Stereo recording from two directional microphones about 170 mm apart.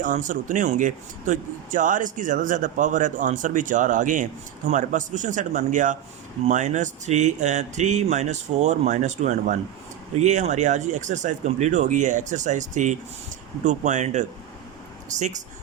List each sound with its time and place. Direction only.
0.0 s a man's voice: 50° right (ahead or behind)